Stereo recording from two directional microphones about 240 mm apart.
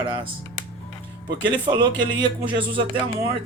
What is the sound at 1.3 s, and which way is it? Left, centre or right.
Speech, centre.